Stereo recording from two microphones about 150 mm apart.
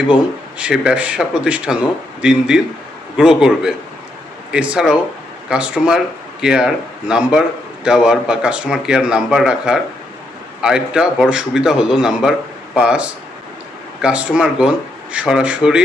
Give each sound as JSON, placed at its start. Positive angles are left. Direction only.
{"t": 0.6, "sound": "speech", "side_deg": -5}